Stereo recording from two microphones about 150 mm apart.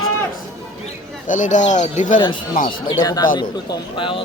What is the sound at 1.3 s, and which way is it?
Speech, 55° left (ahead or behind).